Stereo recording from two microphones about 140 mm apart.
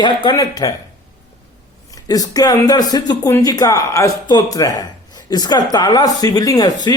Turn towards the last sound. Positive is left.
turn(degrees=30)  # may be behind; listen again after turning